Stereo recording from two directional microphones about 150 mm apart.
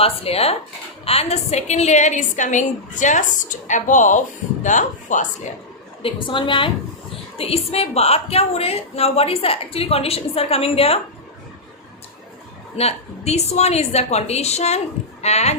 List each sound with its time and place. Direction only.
0.0 s a woman's voice: 40° left (ahead or behind)
6.0 s a woman's voice: 35° left (ahead or behind)
12.7 s a woman's voice: 45° left (ahead or behind)